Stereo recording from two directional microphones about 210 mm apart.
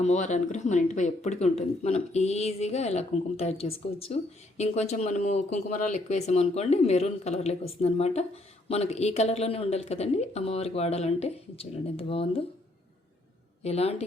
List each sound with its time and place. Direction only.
0.0 s a woman's voice: 35° left (ahead or behind)
13.6 s a woman's voice: 30° left (ahead or behind)